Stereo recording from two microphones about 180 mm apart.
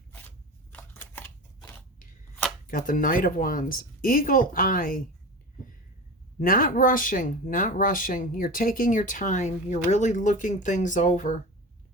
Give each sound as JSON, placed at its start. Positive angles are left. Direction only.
{"t": 0.1, "sound": "shuffling cards", "side_deg": 10}
{"t": 2.6, "sound": "speech", "side_deg": 50}
{"t": 6.4, "sound": "speech", "side_deg": 50}